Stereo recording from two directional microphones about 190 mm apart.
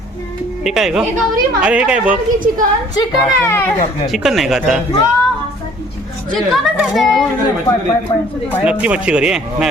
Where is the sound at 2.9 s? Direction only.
15° left (ahead or behind).